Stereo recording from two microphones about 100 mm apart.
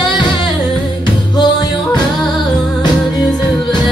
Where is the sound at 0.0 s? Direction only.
50° left (ahead or behind).